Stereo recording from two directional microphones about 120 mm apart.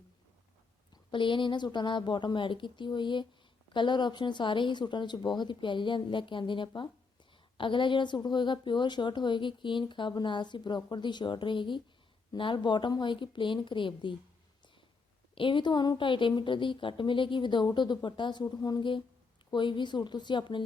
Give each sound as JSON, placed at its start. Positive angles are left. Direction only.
{"t": 1.1, "sound": "a woman's voice", "side_deg": 45}
{"t": 15.4, "sound": "a woman's voice", "side_deg": 45}